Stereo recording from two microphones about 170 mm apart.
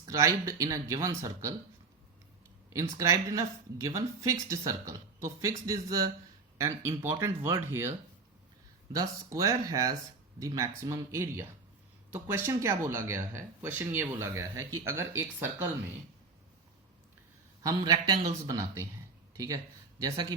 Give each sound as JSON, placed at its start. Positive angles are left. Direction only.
{"t": 0.0, "sound": "speech", "side_deg": -20}
{"t": 2.7, "sound": "speech", "side_deg": -20}
{"t": 17.6, "sound": "speech", "side_deg": -20}
{"t": 20.0, "sound": "speech", "side_deg": -20}